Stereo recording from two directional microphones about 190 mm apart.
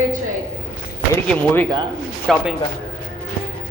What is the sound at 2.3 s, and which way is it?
Music, centre (ahead or behind).